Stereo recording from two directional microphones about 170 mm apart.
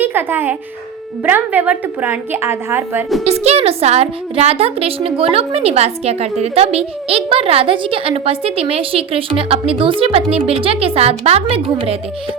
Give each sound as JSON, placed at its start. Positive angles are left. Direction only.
{"t": 0.0, "sound": "a child's voice", "side_deg": -10}
{"t": 3.2, "sound": "a woman's voice", "side_deg": -40}